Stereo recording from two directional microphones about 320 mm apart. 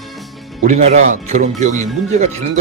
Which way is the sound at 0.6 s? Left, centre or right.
Right.